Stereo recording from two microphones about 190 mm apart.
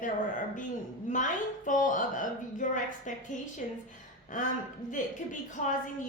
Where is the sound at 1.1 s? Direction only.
40° left (ahead or behind).